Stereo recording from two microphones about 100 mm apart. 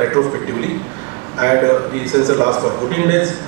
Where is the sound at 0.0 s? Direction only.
30° right (ahead or behind).